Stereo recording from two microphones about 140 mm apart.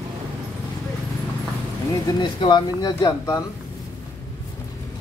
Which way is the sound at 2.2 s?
35° left (ahead or behind).